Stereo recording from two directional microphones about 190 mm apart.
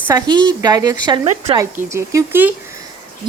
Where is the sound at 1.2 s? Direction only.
35° right (ahead or behind).